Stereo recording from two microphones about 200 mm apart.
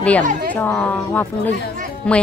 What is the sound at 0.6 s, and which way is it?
Speech, 5° left (ahead or behind).